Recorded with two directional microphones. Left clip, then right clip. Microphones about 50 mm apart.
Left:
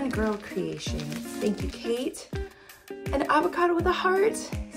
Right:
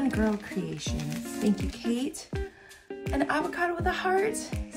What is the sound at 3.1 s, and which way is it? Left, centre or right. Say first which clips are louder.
Speech: left 5 dB; left.